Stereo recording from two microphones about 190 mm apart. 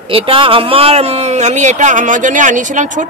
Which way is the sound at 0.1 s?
30° right (ahead or behind).